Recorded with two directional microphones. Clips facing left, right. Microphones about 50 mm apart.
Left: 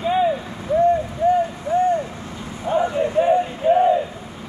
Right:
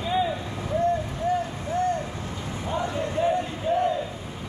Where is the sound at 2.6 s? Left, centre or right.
Left.